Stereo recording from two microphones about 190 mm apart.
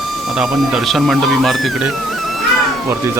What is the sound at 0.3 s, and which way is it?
Speech, centre (ahead or behind).